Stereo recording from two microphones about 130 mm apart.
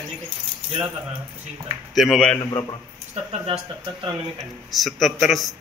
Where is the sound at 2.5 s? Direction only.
35° left (ahead or behind).